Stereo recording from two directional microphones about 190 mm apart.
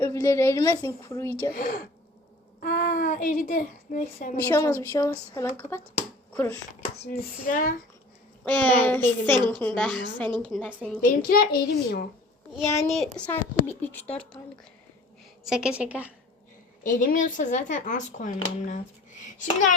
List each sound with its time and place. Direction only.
0.0 s a woman's voice: 15° left (ahead or behind)
1.5 s speech: 45° left (ahead or behind)
4.4 s a woman's voice: 15° left (ahead or behind)
7.0 s speech: 50° left (ahead or behind)
8.4 s a woman's voice: 10° left (ahead or behind)
11.0 s speech: 50° left (ahead or behind)
13.1 s a woman's voice: 10° left (ahead or behind); by 16.1 s 5° right (ahead or behind)
16.8 s speech: 45° left (ahead or behind)